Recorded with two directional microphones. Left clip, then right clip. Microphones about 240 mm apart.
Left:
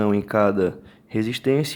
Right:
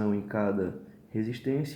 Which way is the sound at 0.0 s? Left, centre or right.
Left.